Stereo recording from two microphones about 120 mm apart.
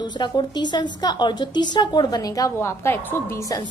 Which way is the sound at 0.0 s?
40° left (ahead or behind).